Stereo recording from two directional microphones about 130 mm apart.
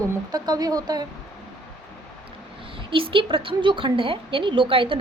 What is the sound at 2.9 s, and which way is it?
A woman's voice, 40° right (ahead or behind).